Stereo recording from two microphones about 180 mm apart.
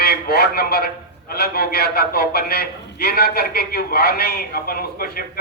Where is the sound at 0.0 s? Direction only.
60° left (ahead or behind).